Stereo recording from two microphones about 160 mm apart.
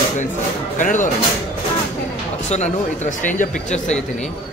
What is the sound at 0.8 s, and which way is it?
Speech, 55° left (ahead or behind).